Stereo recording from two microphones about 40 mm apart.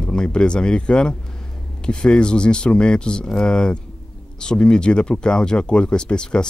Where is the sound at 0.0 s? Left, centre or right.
Left.